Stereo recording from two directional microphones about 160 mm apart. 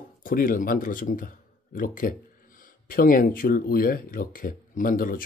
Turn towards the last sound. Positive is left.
turn(degrees=60)  # may be behind; listen again after turning